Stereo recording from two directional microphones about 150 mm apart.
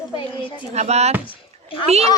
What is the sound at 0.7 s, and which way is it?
Speech, 45° right (ahead or behind).